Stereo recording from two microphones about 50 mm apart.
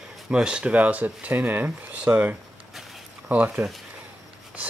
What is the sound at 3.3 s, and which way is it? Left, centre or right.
Speech, right.